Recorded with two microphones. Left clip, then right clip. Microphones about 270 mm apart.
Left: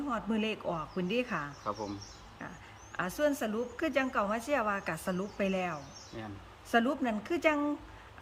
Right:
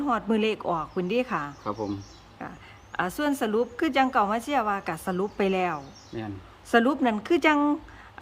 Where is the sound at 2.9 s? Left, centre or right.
Centre.